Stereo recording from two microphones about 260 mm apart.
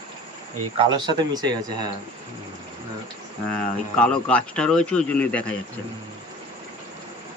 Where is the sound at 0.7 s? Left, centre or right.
Centre.